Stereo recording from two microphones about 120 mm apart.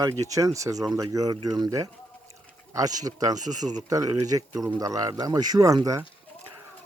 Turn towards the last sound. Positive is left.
turn(degrees=-30)  # may be behind; listen again after turning